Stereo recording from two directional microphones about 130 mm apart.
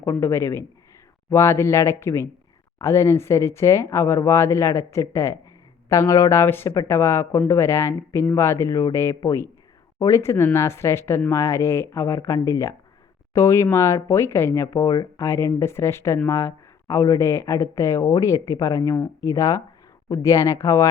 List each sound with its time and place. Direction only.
0.0 s speech: 20° left (ahead or behind)